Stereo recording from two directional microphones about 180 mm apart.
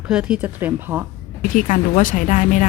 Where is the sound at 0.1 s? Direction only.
5° right (ahead or behind).